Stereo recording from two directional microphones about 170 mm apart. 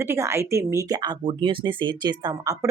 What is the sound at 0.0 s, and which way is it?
Speech, 15° right (ahead or behind).